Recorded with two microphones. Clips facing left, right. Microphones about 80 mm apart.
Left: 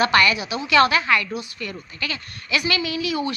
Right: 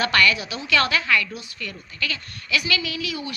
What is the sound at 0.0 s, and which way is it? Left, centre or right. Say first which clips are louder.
A woman's voice: left 2 dB; left.